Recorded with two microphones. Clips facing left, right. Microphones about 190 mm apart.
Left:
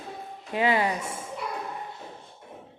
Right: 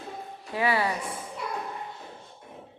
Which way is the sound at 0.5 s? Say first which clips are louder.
Left 2 dB; 20° left (ahead or behind).